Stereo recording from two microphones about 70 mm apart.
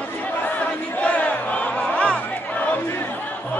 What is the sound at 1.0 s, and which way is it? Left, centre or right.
Battle cry, centre.